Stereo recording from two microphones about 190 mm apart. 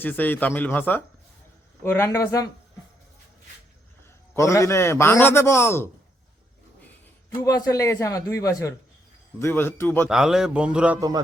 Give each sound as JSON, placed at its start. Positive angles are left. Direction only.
{"t": 0.0, "sound": "a man's voice", "side_deg": 10}
{"t": 4.4, "sound": "a man's voice", "side_deg": 15}
{"t": 7.4, "sound": "a man's voice", "side_deg": 20}
{"t": 10.1, "sound": "a man's voice", "side_deg": 0}